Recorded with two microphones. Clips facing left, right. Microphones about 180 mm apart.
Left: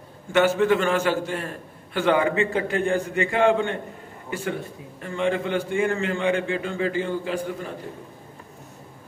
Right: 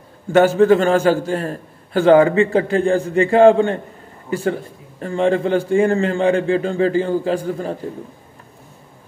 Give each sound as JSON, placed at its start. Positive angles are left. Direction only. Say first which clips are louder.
{"t": 0.3, "sound": "a man's voice", "louder": "right 7 dB", "side_deg": -35}
{"t": 5.0, "sound": "a man's voice", "louder": "right 7 dB", "side_deg": -35}